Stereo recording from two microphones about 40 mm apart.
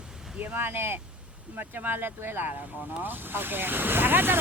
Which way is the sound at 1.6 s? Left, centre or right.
Right.